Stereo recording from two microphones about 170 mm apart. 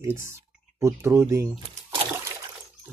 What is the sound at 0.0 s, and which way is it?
Speech, 15° right (ahead or behind).